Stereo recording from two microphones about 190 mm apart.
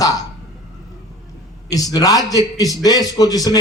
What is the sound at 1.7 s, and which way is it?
A man's voice, 20° left (ahead or behind).